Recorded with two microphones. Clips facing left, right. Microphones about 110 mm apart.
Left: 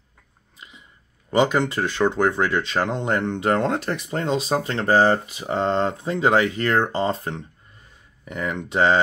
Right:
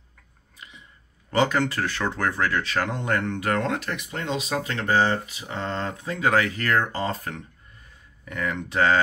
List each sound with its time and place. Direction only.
0.6 s chewing: 20° left (ahead or behind)
1.3 s speech: 15° left (ahead or behind)